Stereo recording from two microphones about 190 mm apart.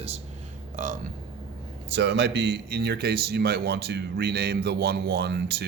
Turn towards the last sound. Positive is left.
turn(degrees=-60)  # may be behind; listen again after turning